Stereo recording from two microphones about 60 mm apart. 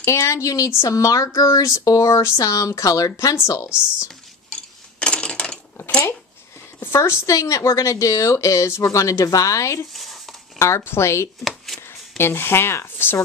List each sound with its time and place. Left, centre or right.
0.0 s speech: left
0.8 s a woman's voice: left
3.4 s a woman's voice: left
4.5 s a sound: centre
6.8 s a woman's voice: left
10.6 s speech: left
11.4 s a sound: centre
12.2 s speech: left